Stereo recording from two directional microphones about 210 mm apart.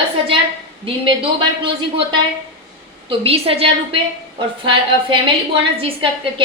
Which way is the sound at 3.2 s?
25° right (ahead or behind).